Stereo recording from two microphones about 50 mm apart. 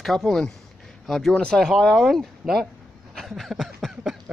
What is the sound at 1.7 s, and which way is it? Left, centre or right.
Speech, centre.